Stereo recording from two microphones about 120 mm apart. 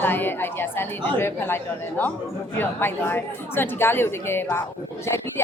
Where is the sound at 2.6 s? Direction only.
20° left (ahead or behind).